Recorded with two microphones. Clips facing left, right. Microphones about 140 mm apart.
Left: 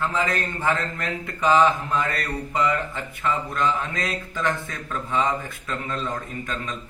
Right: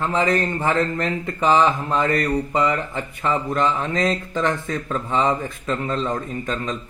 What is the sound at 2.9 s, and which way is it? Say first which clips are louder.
Speech: right 3 dB; 35° right (ahead or behind).